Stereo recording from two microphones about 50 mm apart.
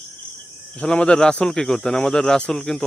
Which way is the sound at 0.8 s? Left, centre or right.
Centre.